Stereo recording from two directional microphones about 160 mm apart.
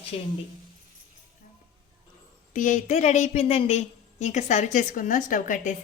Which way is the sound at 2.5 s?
55° left (ahead or behind).